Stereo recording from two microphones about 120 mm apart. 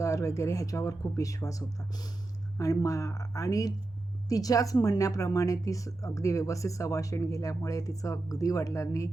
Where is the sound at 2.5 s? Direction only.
30° left (ahead or behind).